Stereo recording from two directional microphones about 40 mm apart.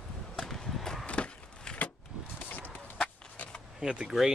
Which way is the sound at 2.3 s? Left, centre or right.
Left.